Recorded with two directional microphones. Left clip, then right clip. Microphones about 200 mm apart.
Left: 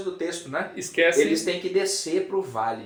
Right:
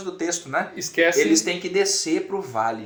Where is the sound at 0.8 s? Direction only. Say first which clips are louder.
Even; 35° right (ahead or behind).